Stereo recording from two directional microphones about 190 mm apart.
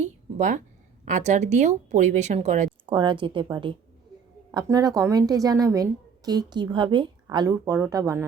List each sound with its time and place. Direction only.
0.0 s a sound: 40° right (ahead or behind)
1.0 s speech: 40° right (ahead or behind)
2.8 s a woman's voice: 25° right (ahead or behind)